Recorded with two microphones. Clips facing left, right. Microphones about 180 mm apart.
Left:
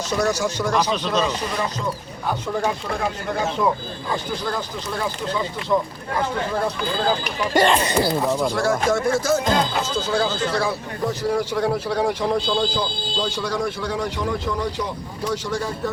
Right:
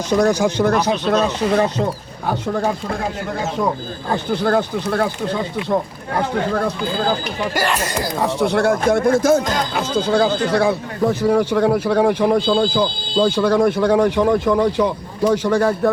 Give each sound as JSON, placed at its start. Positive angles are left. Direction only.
{"t": 0.1, "sound": "a man's voice", "side_deg": -55}
{"t": 4.1, "sound": "a man's voice", "side_deg": -60}
{"t": 8.2, "sound": "a man's voice", "side_deg": -70}